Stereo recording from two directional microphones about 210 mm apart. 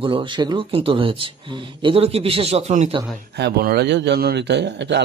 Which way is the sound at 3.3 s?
50° right (ahead or behind).